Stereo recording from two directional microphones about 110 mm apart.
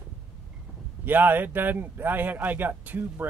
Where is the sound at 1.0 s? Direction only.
15° right (ahead or behind).